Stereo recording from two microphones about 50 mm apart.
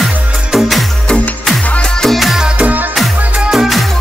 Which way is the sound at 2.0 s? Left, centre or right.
Centre.